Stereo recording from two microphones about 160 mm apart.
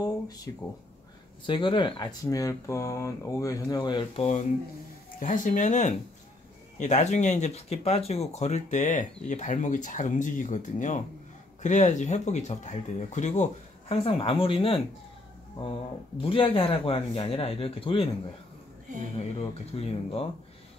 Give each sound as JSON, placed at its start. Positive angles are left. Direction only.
{"t": 1.4, "sound": "speech", "side_deg": 30}
{"t": 5.2, "sound": "speech", "side_deg": 55}
{"t": 16.2, "sound": "speech", "side_deg": 35}
{"t": 19.1, "sound": "speech", "side_deg": 40}